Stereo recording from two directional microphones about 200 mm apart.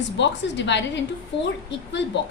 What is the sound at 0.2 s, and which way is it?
A woman's voice, 60° left (ahead or behind).